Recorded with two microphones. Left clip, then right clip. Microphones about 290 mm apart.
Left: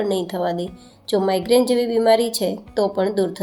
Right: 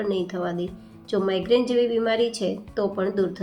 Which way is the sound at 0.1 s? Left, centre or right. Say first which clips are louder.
Left 5 dB; centre.